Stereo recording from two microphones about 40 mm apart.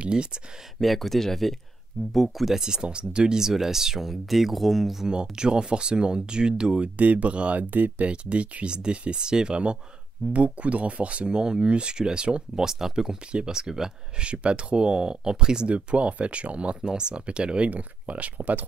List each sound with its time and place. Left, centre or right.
0.0 s speech: right
0.7 s speech: centre; by 3.3 s right
3.3 s speech: centre
5.3 s speech: right
7.0 s speech: right
7.7 s speech: right
8.1 s speech: right
10.3 s speech: right
12.6 s speech: centre
14.2 s speech: right
17.6 s speech: right